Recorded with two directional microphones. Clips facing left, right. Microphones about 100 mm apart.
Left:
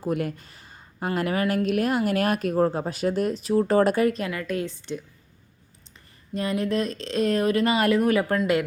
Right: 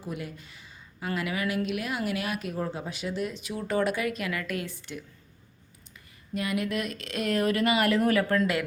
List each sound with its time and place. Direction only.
0.0 s a woman's voice: 55° left (ahead or behind); by 5.0 s 20° left (ahead or behind)
6.3 s speech: 30° left (ahead or behind)